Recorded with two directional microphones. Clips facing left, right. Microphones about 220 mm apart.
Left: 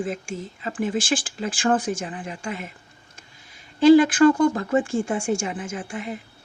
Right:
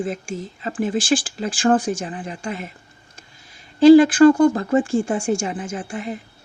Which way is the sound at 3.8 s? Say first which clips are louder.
Right 4 dB; 35° right (ahead or behind).